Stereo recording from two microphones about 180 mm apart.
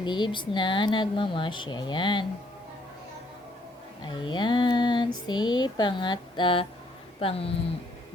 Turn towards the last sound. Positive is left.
turn(degrees=30)  # may be behind; listen again after turning